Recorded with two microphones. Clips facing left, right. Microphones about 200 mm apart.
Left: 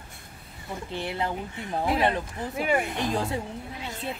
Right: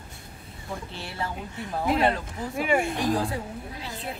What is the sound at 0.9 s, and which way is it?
Speech, 20° left (ahead or behind).